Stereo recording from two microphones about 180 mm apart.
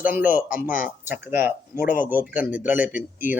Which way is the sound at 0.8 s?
10° right (ahead or behind).